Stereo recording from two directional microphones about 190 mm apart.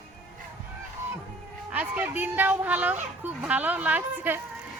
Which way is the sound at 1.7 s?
10° right (ahead or behind).